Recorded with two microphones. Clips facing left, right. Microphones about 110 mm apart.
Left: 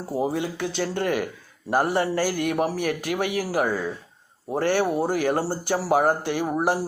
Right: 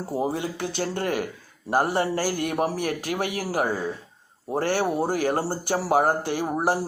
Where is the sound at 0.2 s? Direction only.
35° right (ahead or behind).